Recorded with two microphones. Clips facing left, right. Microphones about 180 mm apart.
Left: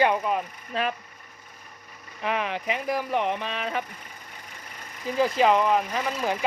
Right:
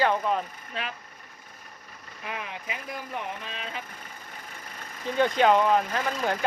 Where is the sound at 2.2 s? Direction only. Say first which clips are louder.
Left 9 dB; 75° left (ahead or behind).